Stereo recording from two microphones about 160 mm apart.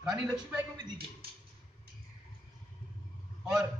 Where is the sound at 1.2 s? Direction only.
70° right (ahead or behind).